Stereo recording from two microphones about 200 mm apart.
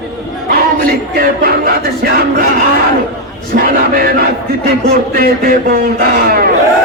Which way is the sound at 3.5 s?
50° right (ahead or behind).